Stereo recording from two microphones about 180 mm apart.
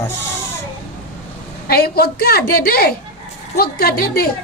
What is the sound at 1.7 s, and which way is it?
A woman's voice, 60° left (ahead or behind).